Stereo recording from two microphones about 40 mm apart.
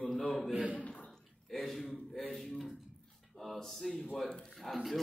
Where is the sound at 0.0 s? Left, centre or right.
Centre.